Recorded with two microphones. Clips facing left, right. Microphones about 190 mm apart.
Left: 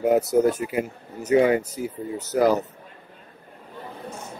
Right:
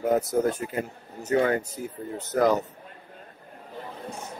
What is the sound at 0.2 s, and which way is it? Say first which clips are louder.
Speech: left 5 dB; 70° left (ahead or behind).